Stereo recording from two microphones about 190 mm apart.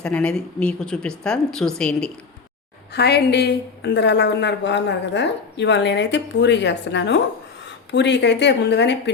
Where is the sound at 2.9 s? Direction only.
60° left (ahead or behind).